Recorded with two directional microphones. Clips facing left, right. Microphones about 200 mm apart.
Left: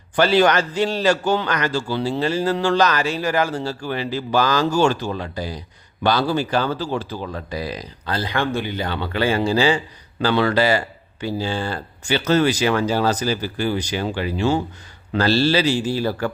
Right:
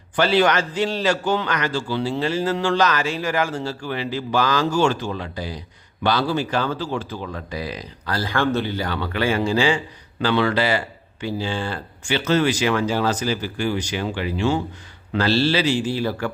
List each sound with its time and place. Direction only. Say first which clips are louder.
0.2 s speech: left 2 dB; 40° left (ahead or behind)
8.0 s speech: right 1 dB; 20° left (ahead or behind); by 16.3 s 40° left (ahead or behind)